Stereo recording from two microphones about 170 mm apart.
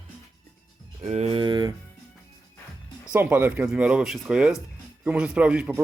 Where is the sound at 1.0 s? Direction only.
40° right (ahead or behind).